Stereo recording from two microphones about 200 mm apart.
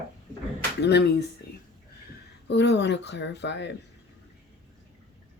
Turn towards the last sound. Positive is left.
turn(degrees=60)  # may be behind; listen again after turning